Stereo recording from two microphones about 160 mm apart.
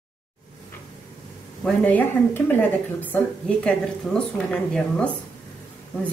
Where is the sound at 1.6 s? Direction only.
10° left (ahead or behind).